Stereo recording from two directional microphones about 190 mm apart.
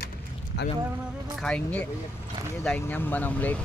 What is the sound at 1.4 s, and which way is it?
Speech, 5° left (ahead or behind).